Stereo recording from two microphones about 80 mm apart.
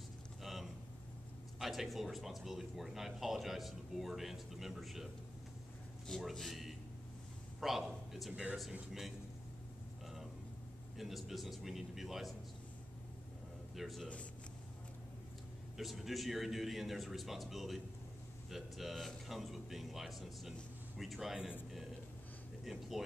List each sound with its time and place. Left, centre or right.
0.4 s a sound: centre
1.6 s speech: centre
8.3 s speech: centre
11.0 s speech: centre
13.7 s speech: centre
15.8 s speech: centre
22.7 s speech: centre